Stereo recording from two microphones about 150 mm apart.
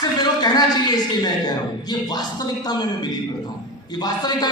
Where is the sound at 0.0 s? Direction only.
30° left (ahead or behind).